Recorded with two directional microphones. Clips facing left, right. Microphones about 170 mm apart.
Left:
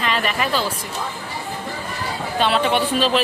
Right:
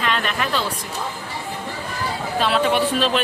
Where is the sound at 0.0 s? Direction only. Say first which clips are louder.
Left 1 dB; centre (ahead or behind).